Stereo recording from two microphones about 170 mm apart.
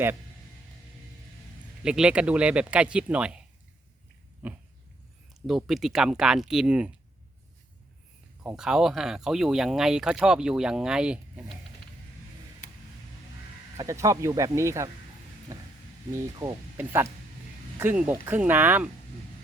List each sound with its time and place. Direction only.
1.8 s speech: 5° right (ahead or behind)
4.4 s dog: 10° right (ahead or behind)
5.5 s speech: centre (ahead or behind)
8.4 s speech: 5° right (ahead or behind)
13.7 s speech: 20° right (ahead or behind)
16.1 s speech: 15° right (ahead or behind)